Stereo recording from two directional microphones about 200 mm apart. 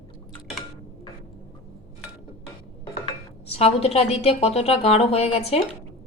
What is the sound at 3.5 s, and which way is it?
A woman's voice, 30° left (ahead or behind).